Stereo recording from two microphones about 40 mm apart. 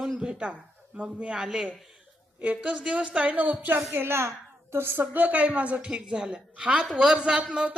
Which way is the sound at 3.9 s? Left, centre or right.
Right.